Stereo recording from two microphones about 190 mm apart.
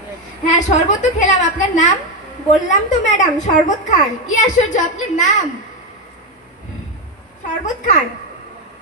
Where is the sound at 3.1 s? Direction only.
40° left (ahead or behind).